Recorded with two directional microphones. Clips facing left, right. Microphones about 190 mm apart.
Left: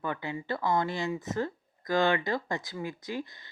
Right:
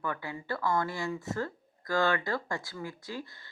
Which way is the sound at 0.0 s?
20° left (ahead or behind).